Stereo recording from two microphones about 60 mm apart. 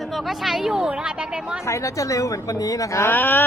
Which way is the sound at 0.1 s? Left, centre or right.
Centre.